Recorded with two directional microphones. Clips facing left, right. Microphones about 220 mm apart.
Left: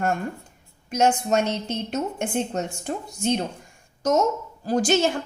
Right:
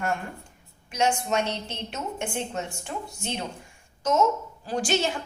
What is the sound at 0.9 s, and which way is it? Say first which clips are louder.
A woman's voice: left 5 dB; 40° left (ahead or behind).